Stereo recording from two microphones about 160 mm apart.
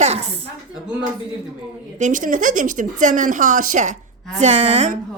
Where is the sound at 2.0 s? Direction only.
50° right (ahead or behind).